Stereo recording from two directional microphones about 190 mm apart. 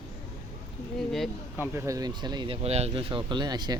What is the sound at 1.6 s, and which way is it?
Speech, 15° right (ahead or behind).